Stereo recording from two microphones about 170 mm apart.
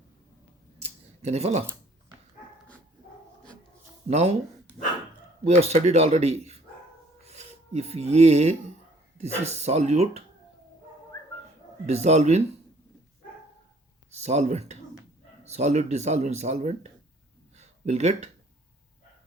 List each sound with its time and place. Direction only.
0.8 s a sound: 40° right (ahead or behind)
4.1 s speech: 35° right (ahead or behind)
5.5 s speech: 40° right (ahead or behind)
11.9 s speech: 40° right (ahead or behind)
14.1 s speech: 40° right (ahead or behind)
17.6 s a sound: 40° right (ahead or behind)